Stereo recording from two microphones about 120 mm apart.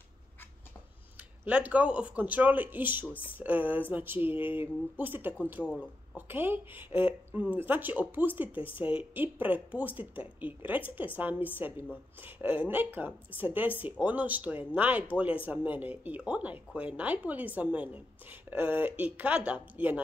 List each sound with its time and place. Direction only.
1.4 s speech: 15° right (ahead or behind)
8.5 s speech: 45° left (ahead or behind)
8.7 s speech: 15° right (ahead or behind)